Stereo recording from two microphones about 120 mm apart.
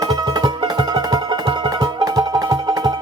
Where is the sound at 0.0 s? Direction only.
35° right (ahead or behind).